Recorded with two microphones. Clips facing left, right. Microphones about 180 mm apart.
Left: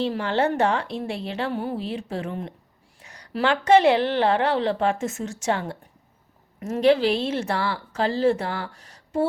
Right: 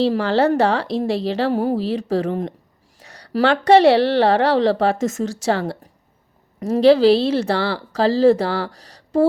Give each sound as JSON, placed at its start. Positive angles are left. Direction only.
{"t": 0.0, "sound": "speech", "side_deg": -35}
{"t": 3.0, "sound": "a sound", "side_deg": -35}
{"t": 3.3, "sound": "speech", "side_deg": -35}